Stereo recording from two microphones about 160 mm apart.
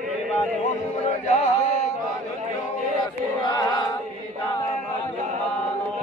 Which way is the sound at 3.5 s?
30° left (ahead or behind).